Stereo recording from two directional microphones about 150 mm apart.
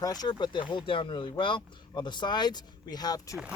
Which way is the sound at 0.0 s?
25° left (ahead or behind).